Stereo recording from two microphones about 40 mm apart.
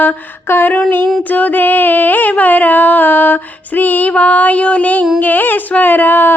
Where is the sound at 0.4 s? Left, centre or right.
Left.